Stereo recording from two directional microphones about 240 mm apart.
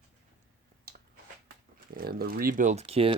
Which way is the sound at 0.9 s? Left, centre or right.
Right.